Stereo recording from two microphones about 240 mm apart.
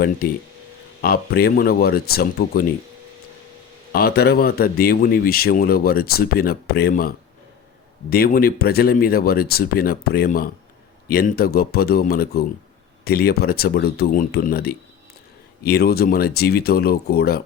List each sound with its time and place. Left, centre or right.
1.0 s speech: left
3.9 s speech: left
8.1 s speech: left